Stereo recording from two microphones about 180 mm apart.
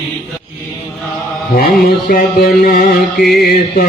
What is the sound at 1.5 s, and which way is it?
Mantra, 55° left (ahead or behind).